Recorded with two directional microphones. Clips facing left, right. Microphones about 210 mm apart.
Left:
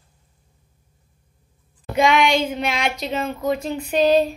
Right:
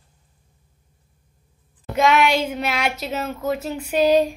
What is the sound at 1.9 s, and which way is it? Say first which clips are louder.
A woman's voice: even; 5° right (ahead or behind).